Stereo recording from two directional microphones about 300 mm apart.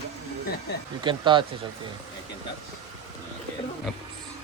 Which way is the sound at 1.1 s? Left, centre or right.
Centre.